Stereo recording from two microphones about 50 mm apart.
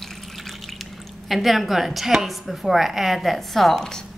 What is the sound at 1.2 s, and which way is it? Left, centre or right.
A woman's voice, centre.